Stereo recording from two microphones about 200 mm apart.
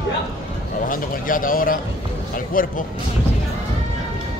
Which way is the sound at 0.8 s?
45° left (ahead or behind).